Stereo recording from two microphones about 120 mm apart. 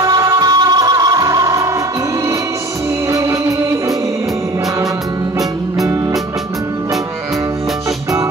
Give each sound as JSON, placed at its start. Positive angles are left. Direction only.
{"t": 0.0, "sound": "music", "side_deg": -30}
{"t": 3.1, "sound": "music", "side_deg": -25}